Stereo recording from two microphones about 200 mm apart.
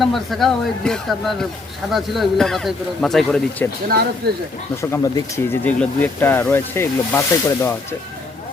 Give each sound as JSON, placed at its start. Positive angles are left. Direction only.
{"t": 0.0, "sound": "speech", "side_deg": 0}
{"t": 4.2, "sound": "speech", "side_deg": -50}
{"t": 4.8, "sound": "speech", "side_deg": 15}